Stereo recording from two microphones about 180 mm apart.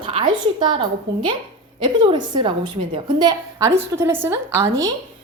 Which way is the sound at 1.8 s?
25° right (ahead or behind).